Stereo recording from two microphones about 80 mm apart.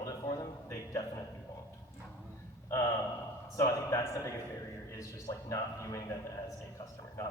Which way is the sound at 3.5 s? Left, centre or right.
Left.